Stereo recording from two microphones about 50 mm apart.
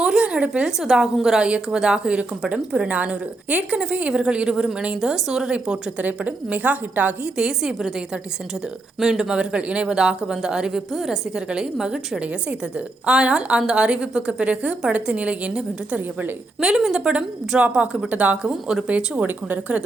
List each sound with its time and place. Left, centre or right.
0.0 s a sound: right
0.8 s speech: centre
1.4 s a woman's voice: centre
6.0 s a woman's voice: right
7.3 s speech: centre
9.0 s a woman's voice: centre
11.3 s a woman's voice: centre
16.6 s a woman's voice: centre; by 18.3 s right
18.4 s speech: centre
18.9 s a woman's voice: right